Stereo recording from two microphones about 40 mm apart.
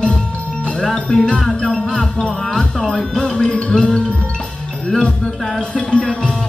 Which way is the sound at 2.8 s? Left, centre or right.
Centre.